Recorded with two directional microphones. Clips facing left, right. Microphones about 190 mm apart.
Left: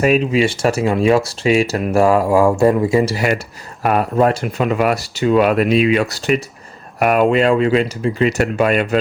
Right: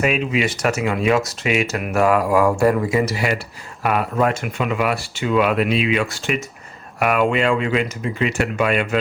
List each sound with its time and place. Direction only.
0.0 s speech: 40° left (ahead or behind)
3.2 s speech: 45° left (ahead or behind)